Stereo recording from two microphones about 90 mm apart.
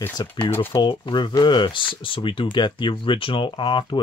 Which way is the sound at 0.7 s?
75° left (ahead or behind).